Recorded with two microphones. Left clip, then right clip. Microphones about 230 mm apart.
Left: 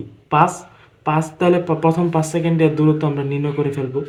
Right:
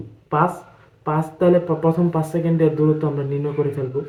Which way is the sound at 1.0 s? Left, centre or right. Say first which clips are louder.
Left 1 dB; left.